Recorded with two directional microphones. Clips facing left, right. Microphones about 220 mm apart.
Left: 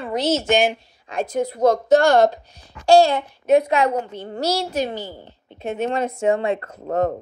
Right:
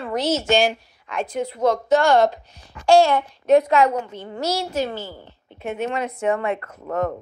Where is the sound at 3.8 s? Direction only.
30° left (ahead or behind).